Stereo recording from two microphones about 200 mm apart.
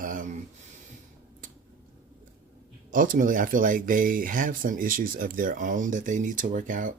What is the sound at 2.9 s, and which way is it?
Speech, 40° right (ahead or behind).